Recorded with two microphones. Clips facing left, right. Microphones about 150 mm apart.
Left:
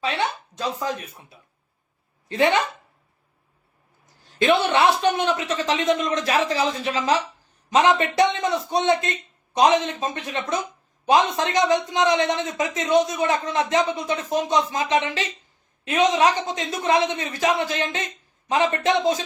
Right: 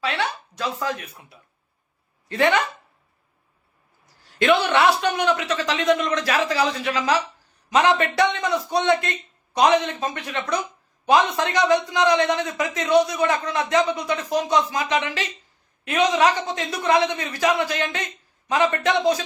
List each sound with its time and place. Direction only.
0.0 s speech: 20° left (ahead or behind)
2.3 s speech: 20° left (ahead or behind)
4.0 s speech: 20° left (ahead or behind)